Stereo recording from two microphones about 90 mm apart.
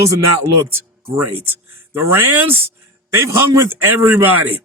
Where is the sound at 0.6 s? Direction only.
25° right (ahead or behind).